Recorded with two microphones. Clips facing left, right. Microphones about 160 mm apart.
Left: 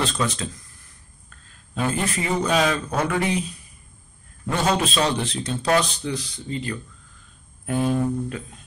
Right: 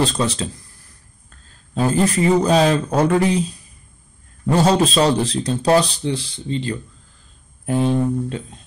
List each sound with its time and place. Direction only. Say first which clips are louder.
0.0 s a man's voice: right 5 dB; 30° right (ahead or behind)
1.8 s a man's voice: right 7 dB; 35° right (ahead or behind)
4.5 s a man's voice: right 7 dB; 35° right (ahead or behind)